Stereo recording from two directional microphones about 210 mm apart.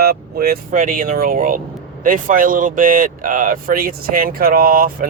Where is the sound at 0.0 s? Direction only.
45° right (ahead or behind).